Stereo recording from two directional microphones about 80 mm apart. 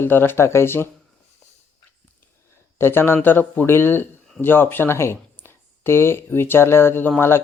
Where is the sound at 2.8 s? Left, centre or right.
Left.